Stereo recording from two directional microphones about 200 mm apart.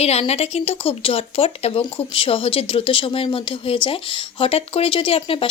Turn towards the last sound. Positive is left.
turn(degrees=25)  # may be behind; listen again after turning